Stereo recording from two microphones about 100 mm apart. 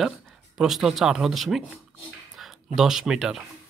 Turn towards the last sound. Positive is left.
turn(degrees=-5)  # may be behind; listen again after turning